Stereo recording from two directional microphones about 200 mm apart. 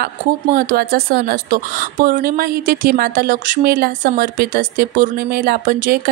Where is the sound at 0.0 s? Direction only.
45° right (ahead or behind).